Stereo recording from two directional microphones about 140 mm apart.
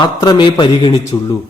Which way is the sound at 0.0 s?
30° left (ahead or behind).